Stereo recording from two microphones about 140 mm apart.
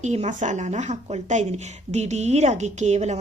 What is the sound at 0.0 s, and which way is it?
A woman's voice, 55° right (ahead or behind).